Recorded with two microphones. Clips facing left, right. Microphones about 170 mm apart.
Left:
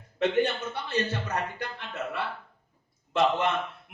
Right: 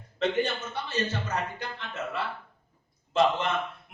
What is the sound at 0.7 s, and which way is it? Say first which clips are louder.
Speech: left 2 dB; 60° left (ahead or behind).